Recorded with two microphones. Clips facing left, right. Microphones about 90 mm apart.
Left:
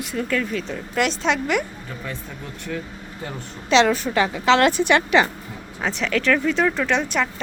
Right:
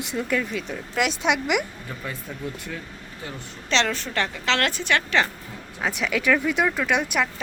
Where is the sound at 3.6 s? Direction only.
10° left (ahead or behind).